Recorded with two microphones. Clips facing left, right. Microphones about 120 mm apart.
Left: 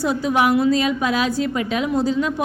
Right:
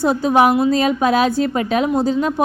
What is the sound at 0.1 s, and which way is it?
A woman's voice, 40° right (ahead or behind).